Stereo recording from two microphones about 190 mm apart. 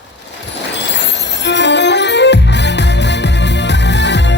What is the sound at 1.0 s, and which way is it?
Music, 65° left (ahead or behind).